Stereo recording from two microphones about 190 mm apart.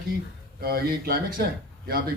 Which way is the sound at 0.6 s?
50° right (ahead or behind).